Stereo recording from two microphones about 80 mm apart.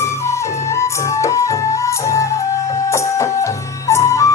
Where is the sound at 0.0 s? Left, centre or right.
Left.